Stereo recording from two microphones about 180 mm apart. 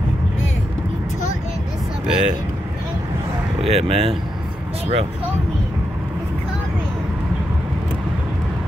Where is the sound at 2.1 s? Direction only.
5° right (ahead or behind).